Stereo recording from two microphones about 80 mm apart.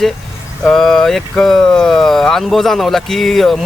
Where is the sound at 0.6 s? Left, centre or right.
Centre.